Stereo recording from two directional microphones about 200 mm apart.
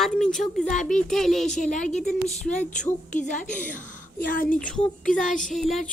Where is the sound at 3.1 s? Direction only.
40° left (ahead or behind).